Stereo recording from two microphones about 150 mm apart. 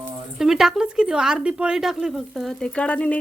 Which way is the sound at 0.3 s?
5° right (ahead or behind).